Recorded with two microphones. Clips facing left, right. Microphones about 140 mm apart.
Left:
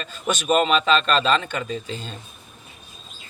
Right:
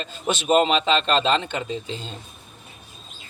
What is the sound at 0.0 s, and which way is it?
A man's voice, 25° right (ahead or behind).